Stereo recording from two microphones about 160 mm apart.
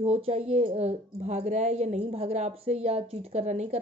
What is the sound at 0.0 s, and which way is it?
Speech, 40° right (ahead or behind).